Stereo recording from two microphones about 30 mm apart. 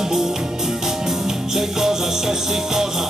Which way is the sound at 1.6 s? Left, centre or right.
Centre.